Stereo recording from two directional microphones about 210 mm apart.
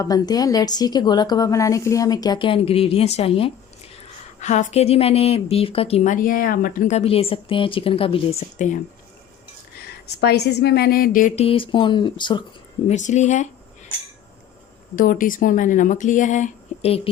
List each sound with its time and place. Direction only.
0.0 s speech: 15° left (ahead or behind); by 8.8 s 35° left (ahead or behind)
10.2 s a woman's voice: 50° left (ahead or behind)
11.4 s speech: 25° left (ahead or behind)
12.9 s speech: 35° left (ahead or behind)
14.9 s speech: 40° left (ahead or behind)